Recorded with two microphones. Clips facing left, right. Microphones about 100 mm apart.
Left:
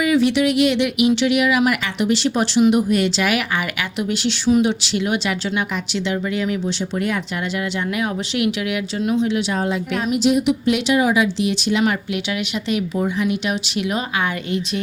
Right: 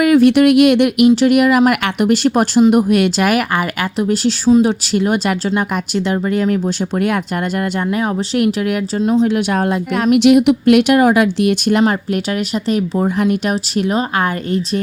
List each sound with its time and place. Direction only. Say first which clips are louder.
0.0 s speech: right 7 dB; 55° right (ahead or behind)
7.9 s speech: right 5 dB; 35° right (ahead or behind)
9.2 s speech: right 5 dB; 55° right (ahead or behind)
12.6 s speech: right 4 dB; 40° right (ahead or behind)